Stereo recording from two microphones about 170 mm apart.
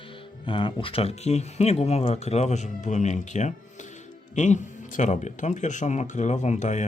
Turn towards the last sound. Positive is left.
turn(degrees=45)  # may be behind; listen again after turning